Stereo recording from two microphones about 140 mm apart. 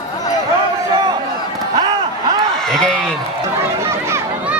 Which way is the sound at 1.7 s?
30° right (ahead or behind).